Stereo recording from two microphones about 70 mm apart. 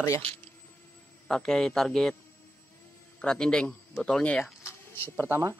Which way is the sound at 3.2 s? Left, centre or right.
Centre.